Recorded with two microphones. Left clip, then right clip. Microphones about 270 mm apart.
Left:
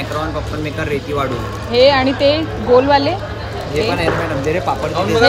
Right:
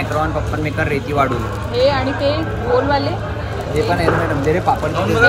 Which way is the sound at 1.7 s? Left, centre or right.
Left.